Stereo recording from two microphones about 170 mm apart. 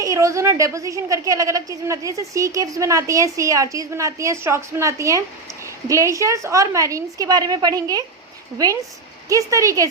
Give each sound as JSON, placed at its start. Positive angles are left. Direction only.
{"t": 0.0, "sound": "a woman's voice", "side_deg": -20}